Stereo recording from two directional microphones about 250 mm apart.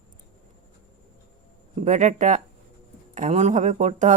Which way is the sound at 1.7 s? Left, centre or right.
Right.